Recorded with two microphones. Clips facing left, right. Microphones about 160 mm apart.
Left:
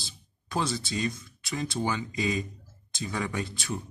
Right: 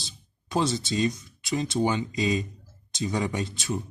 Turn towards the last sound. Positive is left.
turn(degrees=-20)  # may be behind; listen again after turning